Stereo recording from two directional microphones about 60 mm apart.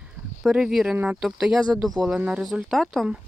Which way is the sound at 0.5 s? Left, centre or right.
Centre.